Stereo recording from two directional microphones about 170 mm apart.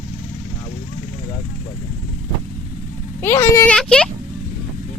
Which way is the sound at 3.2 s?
15° left (ahead or behind).